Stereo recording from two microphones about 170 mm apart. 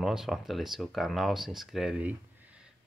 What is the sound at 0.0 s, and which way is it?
Speech, centre (ahead or behind).